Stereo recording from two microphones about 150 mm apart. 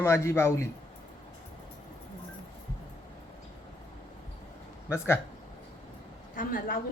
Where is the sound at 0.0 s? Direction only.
20° left (ahead or behind).